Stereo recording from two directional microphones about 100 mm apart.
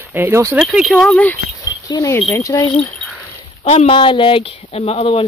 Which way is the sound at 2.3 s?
35° left (ahead or behind).